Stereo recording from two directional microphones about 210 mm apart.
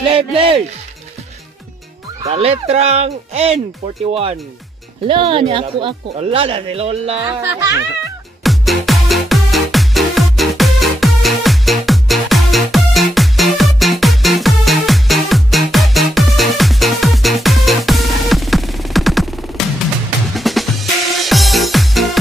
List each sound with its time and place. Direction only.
0.0 s speech: 25° right (ahead or behind)
2.2 s speech: 30° right (ahead or behind)
8.4 s music: centre (ahead or behind)